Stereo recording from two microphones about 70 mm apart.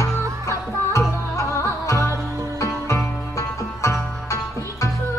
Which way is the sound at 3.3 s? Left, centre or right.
Left.